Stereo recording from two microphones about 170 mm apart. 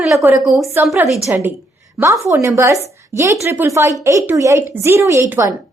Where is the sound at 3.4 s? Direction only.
15° right (ahead or behind).